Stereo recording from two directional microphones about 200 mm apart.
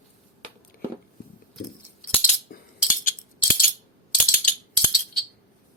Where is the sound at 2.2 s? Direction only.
40° left (ahead or behind).